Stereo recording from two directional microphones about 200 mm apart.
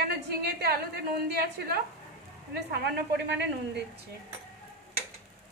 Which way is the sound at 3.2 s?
60° right (ahead or behind).